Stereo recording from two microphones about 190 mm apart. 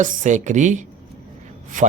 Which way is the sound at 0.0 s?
45° right (ahead or behind).